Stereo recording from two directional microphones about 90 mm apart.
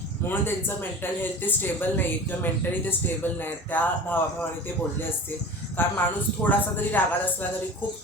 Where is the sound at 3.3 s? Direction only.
20° left (ahead or behind).